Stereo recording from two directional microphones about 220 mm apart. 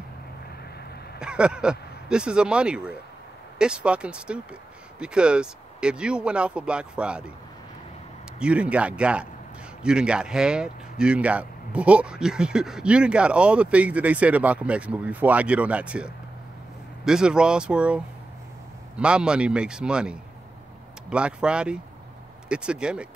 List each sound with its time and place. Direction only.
1.2 s speech: 5° right (ahead or behind)
8.4 s speech: 5° right (ahead or behind)